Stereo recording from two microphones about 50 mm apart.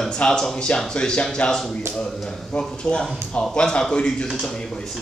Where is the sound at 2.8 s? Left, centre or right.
Centre.